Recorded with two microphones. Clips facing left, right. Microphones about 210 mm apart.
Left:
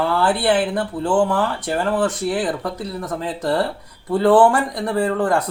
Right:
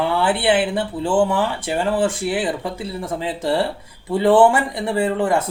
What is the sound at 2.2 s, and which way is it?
Speech, 5° right (ahead or behind).